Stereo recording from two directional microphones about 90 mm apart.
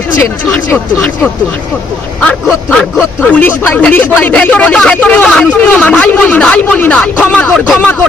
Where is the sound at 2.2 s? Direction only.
15° left (ahead or behind).